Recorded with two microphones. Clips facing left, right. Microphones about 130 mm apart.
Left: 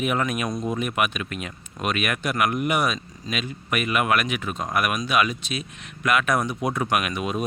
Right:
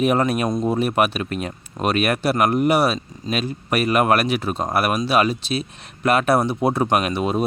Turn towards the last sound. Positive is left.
turn(degrees=-35)  # may be behind; listen again after turning